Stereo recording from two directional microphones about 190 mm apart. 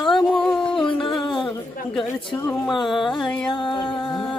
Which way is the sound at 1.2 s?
25° left (ahead or behind).